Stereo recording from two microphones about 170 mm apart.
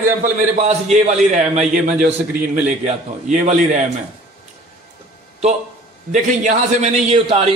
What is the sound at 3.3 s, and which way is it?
Speech, 45° right (ahead or behind).